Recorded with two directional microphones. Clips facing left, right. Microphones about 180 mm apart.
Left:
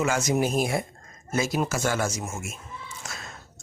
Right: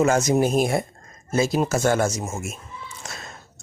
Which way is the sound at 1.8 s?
50° right (ahead or behind).